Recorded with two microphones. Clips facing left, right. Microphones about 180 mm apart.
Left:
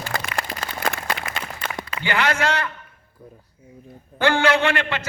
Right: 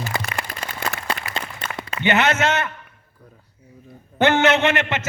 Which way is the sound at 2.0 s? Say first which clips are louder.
Right 3 dB; 25° right (ahead or behind).